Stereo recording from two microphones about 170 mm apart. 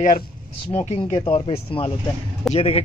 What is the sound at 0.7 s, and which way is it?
Speech, 40° left (ahead or behind).